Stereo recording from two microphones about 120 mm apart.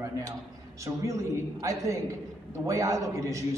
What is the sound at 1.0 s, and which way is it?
A man's voice, 25° right (ahead or behind).